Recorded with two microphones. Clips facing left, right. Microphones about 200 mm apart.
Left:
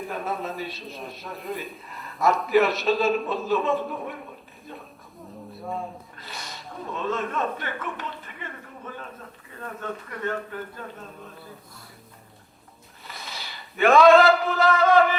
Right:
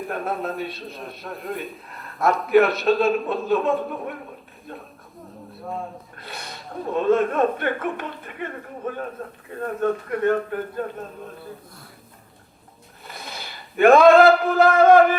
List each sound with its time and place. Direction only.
0.0 s a man's voice: centre (ahead or behind)
6.1 s speech: 55° right (ahead or behind)
13.1 s drawer open or close: 50° right (ahead or behind)
13.7 s speech: 55° right (ahead or behind)